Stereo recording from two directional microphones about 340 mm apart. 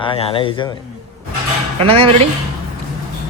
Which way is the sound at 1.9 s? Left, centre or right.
Centre.